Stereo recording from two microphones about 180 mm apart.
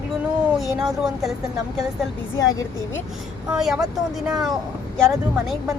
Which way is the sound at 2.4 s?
20° left (ahead or behind).